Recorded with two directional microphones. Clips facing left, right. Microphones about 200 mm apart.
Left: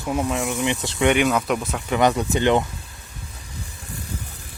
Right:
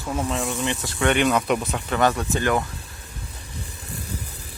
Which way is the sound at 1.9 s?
15° left (ahead or behind).